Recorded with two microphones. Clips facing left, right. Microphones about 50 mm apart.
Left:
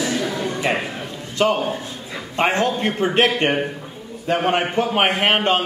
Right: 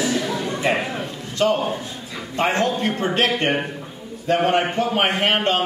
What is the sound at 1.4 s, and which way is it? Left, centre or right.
A man's voice, left.